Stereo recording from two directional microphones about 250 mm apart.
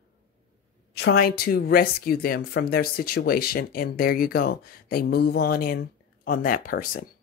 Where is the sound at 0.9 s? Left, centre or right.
Left.